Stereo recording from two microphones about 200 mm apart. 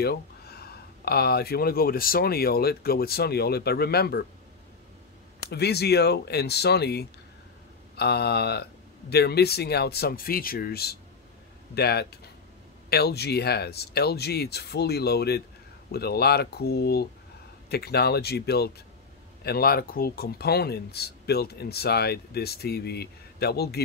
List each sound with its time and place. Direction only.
0.0 s speech: 50° left (ahead or behind)
5.5 s speech: 55° left (ahead or behind)